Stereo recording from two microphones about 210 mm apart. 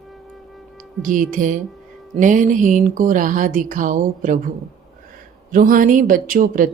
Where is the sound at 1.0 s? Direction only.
40° right (ahead or behind).